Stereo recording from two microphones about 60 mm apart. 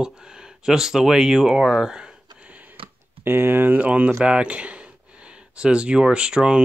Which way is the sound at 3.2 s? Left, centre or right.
Right.